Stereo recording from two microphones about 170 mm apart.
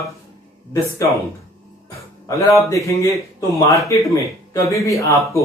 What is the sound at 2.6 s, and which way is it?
Speech, 15° left (ahead or behind).